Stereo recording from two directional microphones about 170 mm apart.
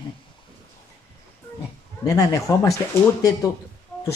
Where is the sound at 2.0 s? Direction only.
20° left (ahead or behind).